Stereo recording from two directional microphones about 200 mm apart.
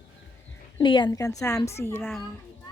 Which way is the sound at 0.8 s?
25° left (ahead or behind).